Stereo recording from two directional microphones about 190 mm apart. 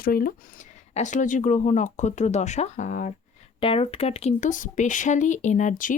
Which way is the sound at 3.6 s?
30° left (ahead or behind).